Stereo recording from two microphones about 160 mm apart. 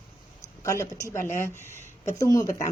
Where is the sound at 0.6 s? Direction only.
20° left (ahead or behind).